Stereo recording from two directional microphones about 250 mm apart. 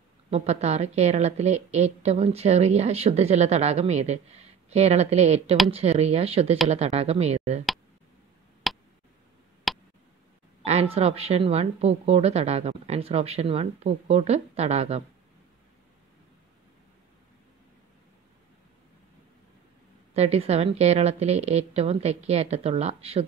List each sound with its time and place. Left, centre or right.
0.3 s a woman's voice: right
8.6 s tick: centre
10.6 s a woman's voice: right
20.2 s a woman's voice: right